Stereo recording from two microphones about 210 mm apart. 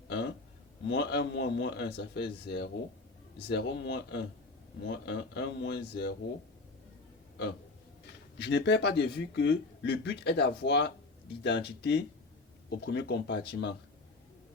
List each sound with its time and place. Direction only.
0.9 s a man's voice: 55° left (ahead or behind)
8.4 s a man's voice: 55° left (ahead or behind)